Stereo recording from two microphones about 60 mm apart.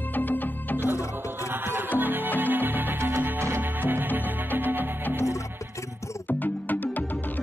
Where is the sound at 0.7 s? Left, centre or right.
Right.